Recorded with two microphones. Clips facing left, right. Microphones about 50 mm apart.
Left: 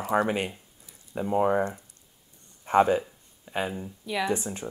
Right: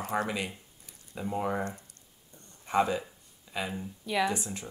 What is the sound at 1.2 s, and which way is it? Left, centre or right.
Speech, left.